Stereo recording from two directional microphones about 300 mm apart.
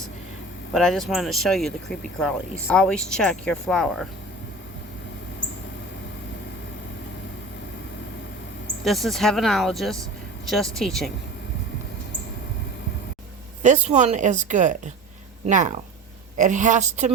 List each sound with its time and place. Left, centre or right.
0.7 s speech: centre
8.8 s speech: centre
13.6 s speech: right